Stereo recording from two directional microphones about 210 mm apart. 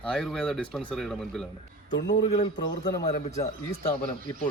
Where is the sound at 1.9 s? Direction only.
60° left (ahead or behind).